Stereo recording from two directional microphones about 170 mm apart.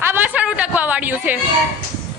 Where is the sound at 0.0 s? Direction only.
10° right (ahead or behind).